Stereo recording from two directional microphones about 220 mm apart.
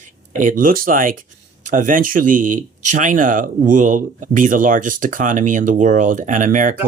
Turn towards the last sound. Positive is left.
turn(degrees=-35)  # may be behind; listen again after turning